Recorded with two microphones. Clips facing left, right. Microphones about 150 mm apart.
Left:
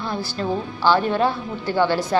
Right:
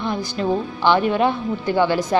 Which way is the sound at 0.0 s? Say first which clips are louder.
Right 3 dB; 15° right (ahead or behind).